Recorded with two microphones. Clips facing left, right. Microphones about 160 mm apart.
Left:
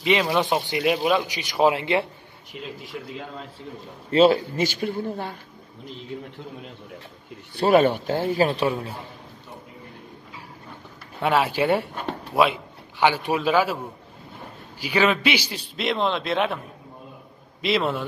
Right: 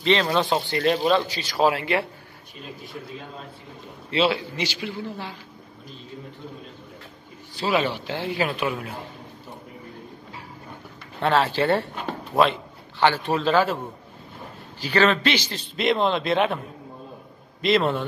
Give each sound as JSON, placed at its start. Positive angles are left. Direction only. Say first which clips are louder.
{"t": 0.0, "sound": "a man's voice", "louder": "even", "side_deg": 10}
{"t": 2.5, "sound": "speech", "louder": "left 3 dB", "side_deg": 80}
{"t": 4.1, "sound": "a man's voice", "louder": "left 6 dB", "side_deg": 45}
{"t": 7.5, "sound": "a man's voice", "louder": "left 6 dB", "side_deg": 55}
{"t": 11.1, "sound": "a man's voice", "louder": "even", "side_deg": 10}
{"t": 14.8, "sound": "a man's voice", "louder": "right 1 dB", "side_deg": 10}
{"t": 17.6, "sound": "a man's voice", "louder": "right 2 dB", "side_deg": 0}